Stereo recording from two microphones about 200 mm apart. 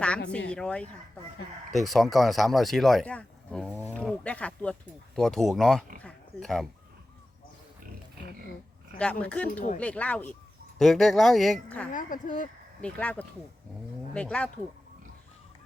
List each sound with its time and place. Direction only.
0.3 s speech: 5° left (ahead or behind)
3.8 s livestock: 10° right (ahead or behind)
4.2 s speech: 5° left (ahead or behind)
6.0 s a sound: 5° left (ahead or behind)
9.0 s speech: 5° left (ahead or behind)
11.9 s speech: 40° left (ahead or behind)
12.8 s speech: 5° left (ahead or behind)